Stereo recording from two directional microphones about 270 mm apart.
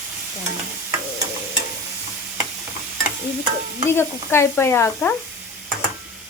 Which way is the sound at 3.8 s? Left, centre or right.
Centre.